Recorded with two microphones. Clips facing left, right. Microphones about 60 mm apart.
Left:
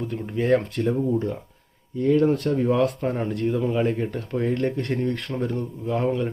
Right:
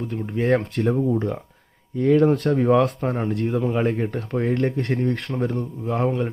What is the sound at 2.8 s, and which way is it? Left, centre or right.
Speech, right.